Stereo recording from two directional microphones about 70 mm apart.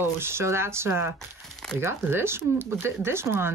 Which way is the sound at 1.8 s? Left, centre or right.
Right.